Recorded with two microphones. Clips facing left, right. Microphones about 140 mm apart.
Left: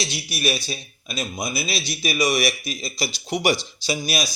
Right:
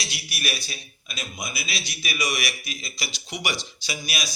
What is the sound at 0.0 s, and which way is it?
A man's voice, 25° left (ahead or behind).